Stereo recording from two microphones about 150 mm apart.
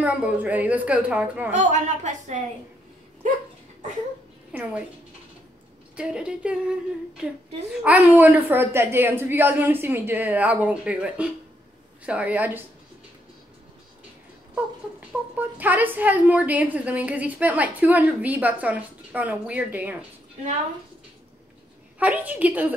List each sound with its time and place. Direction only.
0.0 s speech: 10° right (ahead or behind)
1.5 s a woman's voice: 55° right (ahead or behind)
4.5 s a woman's voice: 5° right (ahead or behind)
5.9 s speech: 5° right (ahead or behind)
7.8 s speech: 10° right (ahead or behind)
14.5 s speech: 10° right (ahead or behind)
21.9 s speech: 10° right (ahead or behind)